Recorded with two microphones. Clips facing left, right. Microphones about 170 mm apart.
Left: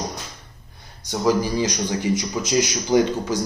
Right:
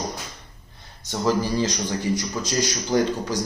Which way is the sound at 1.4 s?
15° left (ahead or behind).